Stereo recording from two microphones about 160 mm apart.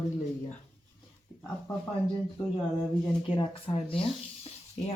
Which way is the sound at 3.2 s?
30° left (ahead or behind).